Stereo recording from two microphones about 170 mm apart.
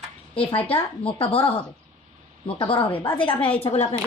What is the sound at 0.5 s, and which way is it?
Speech, 35° left (ahead or behind).